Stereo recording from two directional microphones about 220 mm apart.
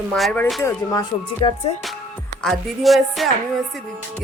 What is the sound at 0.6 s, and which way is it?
Music, 15° left (ahead or behind).